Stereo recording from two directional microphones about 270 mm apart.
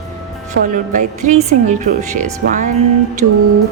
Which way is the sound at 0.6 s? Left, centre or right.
Right.